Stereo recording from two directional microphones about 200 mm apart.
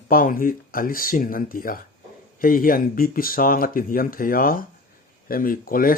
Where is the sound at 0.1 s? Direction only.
45° left (ahead or behind).